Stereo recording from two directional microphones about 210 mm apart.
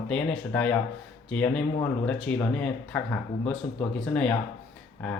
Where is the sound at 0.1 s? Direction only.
5° left (ahead or behind).